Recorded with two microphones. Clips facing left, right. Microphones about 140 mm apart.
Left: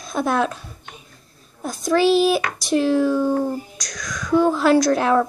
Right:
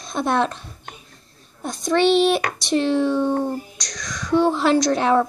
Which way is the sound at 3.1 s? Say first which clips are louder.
Left 1 dB; 25° right (ahead or behind).